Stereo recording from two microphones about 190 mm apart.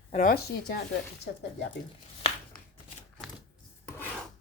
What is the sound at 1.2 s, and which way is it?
Speech, 65° left (ahead or behind).